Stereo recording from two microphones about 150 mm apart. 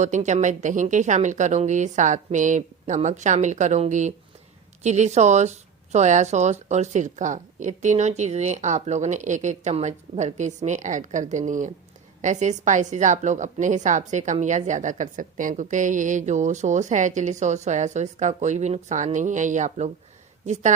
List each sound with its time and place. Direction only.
0.0 s a woman's voice: 50° right (ahead or behind)